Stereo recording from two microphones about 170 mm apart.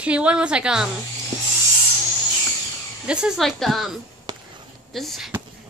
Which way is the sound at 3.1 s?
5° right (ahead or behind).